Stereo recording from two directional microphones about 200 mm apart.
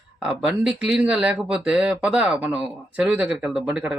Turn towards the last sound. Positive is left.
turn(degrees=-5)  # may be behind; listen again after turning